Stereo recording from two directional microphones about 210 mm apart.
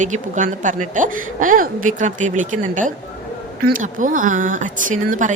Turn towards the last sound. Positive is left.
turn(degrees=-35)  # may be behind; listen again after turning